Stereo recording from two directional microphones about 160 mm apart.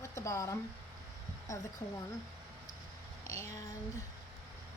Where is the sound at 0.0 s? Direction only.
15° left (ahead or behind).